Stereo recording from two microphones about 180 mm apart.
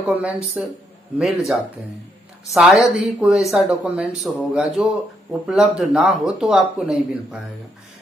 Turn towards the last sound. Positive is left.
turn(degrees=0)  # may be behind; listen again after turning